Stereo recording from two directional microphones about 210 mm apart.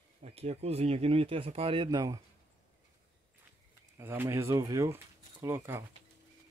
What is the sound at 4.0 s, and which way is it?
Speech, 10° right (ahead or behind).